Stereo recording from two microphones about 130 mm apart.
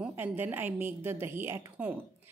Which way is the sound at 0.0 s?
15° right (ahead or behind).